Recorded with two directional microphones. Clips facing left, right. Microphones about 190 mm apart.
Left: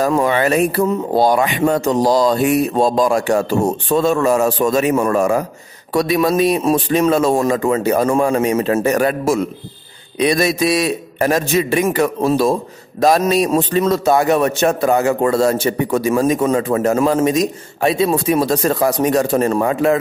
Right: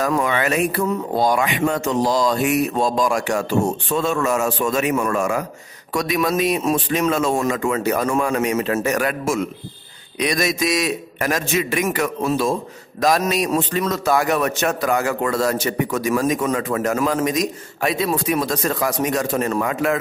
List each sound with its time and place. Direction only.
0.0 s a man's voice: 30° left (ahead or behind)